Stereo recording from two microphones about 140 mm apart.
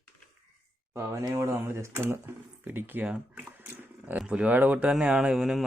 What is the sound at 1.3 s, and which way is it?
Speech, 20° right (ahead or behind).